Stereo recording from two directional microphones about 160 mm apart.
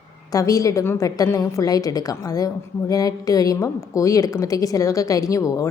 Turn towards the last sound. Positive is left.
turn(degrees=20)  # may be behind; listen again after turning